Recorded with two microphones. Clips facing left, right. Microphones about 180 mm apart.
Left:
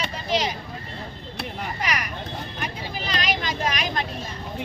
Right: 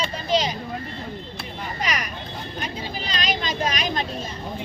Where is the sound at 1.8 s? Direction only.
20° right (ahead or behind).